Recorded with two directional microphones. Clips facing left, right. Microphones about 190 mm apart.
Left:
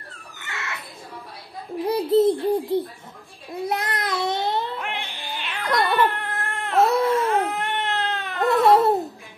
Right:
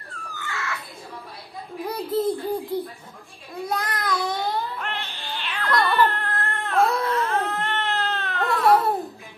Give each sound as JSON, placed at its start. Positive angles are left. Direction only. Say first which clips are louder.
{"t": 0.3, "sound": "a sound", "louder": "right 3 dB", "side_deg": 20}
{"t": 1.9, "sound": "a sound", "louder": "left 6 dB", "side_deg": 20}
{"t": 3.6, "sound": "child singing", "louder": "left 1 dB", "side_deg": 20}
{"t": 4.7, "sound": "dog", "louder": "left 1 dB", "side_deg": 10}
{"t": 6.7, "sound": "baby cry", "louder": "left 3 dB", "side_deg": 25}
{"t": 7.2, "sound": "cat", "louder": "left 3 dB", "side_deg": 15}
{"t": 8.6, "sound": "babbling", "louder": "left 2 dB", "side_deg": 25}